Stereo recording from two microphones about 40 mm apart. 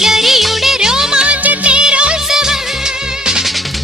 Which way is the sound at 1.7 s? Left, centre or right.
Right.